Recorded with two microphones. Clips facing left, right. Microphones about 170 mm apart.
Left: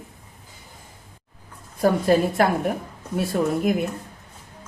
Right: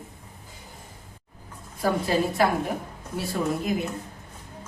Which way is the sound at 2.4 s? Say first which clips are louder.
Left 3 dB; 50° left (ahead or behind).